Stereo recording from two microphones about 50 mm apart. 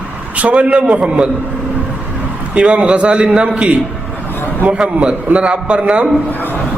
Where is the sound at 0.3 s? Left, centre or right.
Right.